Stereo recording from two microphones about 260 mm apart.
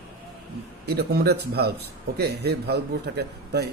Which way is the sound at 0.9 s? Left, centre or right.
Right.